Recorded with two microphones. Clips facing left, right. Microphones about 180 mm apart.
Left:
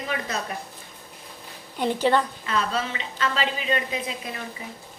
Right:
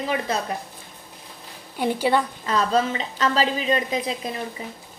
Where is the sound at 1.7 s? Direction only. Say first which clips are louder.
Even; 10° right (ahead or behind).